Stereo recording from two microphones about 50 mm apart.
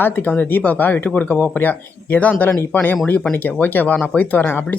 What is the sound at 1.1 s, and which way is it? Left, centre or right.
Speech, left.